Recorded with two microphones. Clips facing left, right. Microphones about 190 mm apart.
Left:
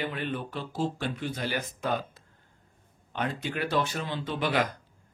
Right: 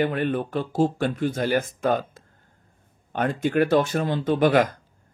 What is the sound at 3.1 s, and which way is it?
Speech, 50° right (ahead or behind).